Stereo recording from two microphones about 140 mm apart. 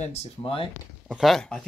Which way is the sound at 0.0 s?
50° left (ahead or behind).